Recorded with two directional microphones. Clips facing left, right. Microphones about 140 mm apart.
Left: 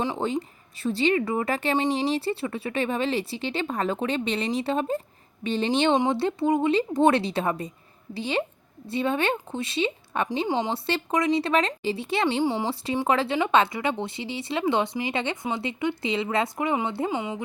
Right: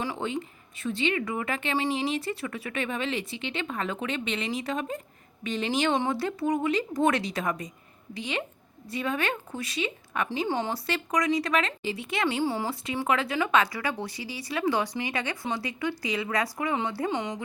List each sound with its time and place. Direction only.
0.2 s speech: 35° left (ahead or behind)
10.5 s speech: 15° left (ahead or behind)
10.8 s speech: 30° left (ahead or behind)
12.4 s speech: 20° left (ahead or behind)
13.1 s speech: 30° left (ahead or behind)
17.1 s speech: 10° left (ahead or behind)